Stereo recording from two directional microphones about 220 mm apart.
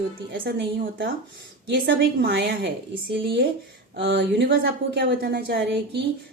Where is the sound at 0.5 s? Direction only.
50° right (ahead or behind).